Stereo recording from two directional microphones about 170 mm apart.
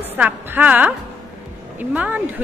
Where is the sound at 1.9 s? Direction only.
10° right (ahead or behind).